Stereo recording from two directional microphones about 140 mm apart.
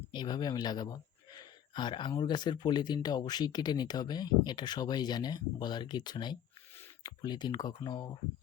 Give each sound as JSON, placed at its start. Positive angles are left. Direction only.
{"t": 0.1, "sound": "speech", "side_deg": 30}